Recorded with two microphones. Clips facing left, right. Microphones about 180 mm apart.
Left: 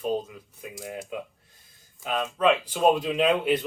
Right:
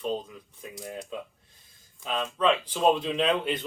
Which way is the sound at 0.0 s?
10° left (ahead or behind).